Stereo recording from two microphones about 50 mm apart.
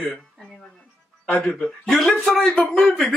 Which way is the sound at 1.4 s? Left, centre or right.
Left.